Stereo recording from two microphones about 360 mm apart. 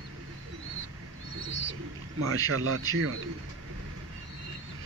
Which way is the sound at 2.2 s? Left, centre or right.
Right.